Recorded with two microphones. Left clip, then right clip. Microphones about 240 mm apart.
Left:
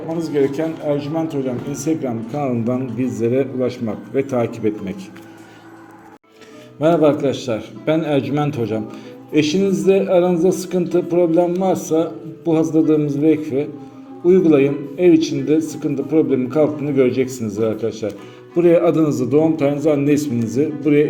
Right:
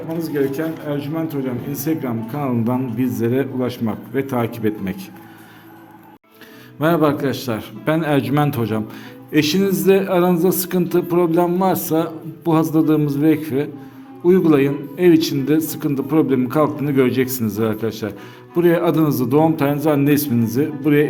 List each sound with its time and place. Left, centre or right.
0.2 s a man's voice: centre
6.7 s a man's voice: right